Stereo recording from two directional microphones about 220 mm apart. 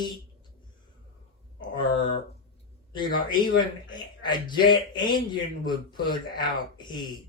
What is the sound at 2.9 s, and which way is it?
Speech, 20° left (ahead or behind).